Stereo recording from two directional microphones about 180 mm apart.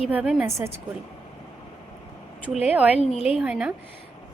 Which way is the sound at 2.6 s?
10° right (ahead or behind).